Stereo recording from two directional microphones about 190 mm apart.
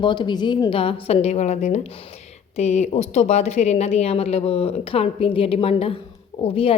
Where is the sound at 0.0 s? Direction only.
25° left (ahead or behind).